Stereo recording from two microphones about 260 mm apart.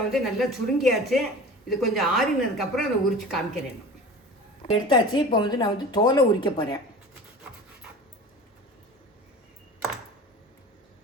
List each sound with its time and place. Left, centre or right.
0.1 s a woman's voice: centre
4.6 s a woman's voice: centre